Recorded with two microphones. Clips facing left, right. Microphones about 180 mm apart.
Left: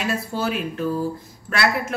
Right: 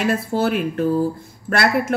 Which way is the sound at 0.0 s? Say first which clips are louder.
Right 5 dB; 50° right (ahead or behind).